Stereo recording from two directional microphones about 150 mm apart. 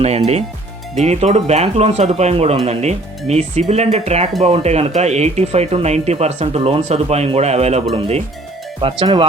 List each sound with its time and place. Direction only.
0.0 s speech: 45° right (ahead or behind)
8.8 s speech: 35° right (ahead or behind)